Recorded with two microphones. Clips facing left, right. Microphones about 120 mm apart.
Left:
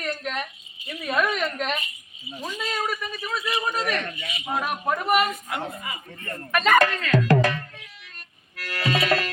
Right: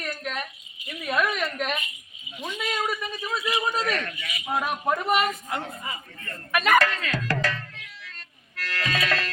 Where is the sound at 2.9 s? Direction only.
20° right (ahead or behind).